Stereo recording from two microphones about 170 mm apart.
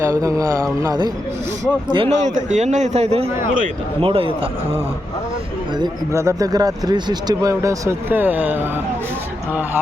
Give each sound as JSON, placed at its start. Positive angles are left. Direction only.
{"t": 0.0, "sound": "speech", "side_deg": -20}
{"t": 2.2, "sound": "a man's voice", "side_deg": -45}
{"t": 5.7, "sound": "speech", "side_deg": -20}